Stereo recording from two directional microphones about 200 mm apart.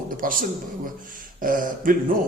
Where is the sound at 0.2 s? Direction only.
45° right (ahead or behind).